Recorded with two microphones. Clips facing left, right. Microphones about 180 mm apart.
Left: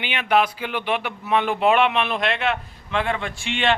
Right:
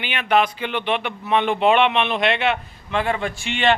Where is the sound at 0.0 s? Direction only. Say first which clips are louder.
Right 1 dB; 15° left (ahead or behind).